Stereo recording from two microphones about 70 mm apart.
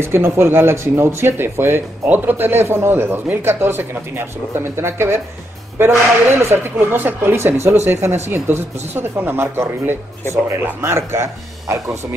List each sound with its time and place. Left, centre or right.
0.0 s speech: right
6.3 s speech: right